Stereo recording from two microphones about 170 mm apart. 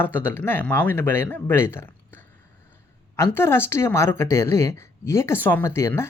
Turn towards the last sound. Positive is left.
turn(degrees=15)  # may be behind; listen again after turning